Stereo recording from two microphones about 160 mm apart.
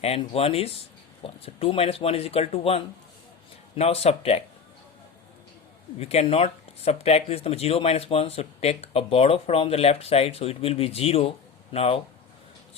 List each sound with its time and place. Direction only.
0.0 s speech: 40° left (ahead or behind)
6.0 s speech: 40° left (ahead or behind)